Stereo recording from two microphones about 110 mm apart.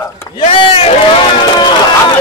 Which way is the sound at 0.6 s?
55° left (ahead or behind).